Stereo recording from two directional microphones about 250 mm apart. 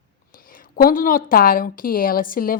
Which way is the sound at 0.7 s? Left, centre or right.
Left.